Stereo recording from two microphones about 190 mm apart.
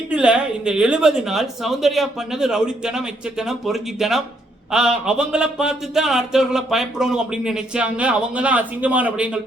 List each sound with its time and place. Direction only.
0.1 s speech: 5° right (ahead or behind)